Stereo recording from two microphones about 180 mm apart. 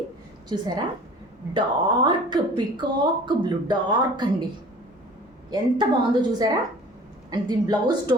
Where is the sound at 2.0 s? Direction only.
25° right (ahead or behind).